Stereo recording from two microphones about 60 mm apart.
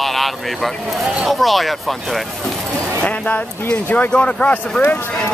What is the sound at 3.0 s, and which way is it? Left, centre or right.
Speech, left.